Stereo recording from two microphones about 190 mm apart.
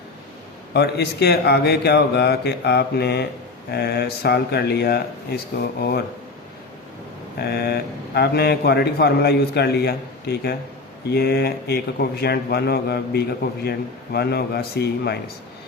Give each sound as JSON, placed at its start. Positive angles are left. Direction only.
{"t": 0.7, "sound": "a man's voice", "side_deg": 60}
{"t": 7.3, "sound": "a man's voice", "side_deg": 55}